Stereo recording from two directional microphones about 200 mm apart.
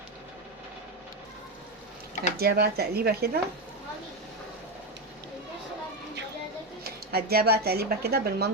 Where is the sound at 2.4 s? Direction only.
50° right (ahead or behind).